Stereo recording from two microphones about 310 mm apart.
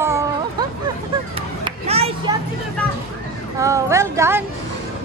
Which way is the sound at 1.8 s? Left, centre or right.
Centre.